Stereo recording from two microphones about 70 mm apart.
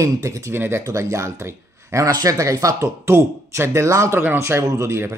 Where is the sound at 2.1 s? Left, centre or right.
Right.